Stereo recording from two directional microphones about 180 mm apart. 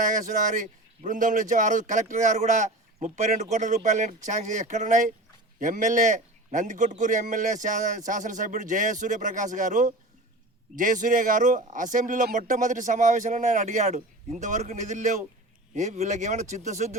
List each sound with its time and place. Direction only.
0.0 s speech: 45° right (ahead or behind)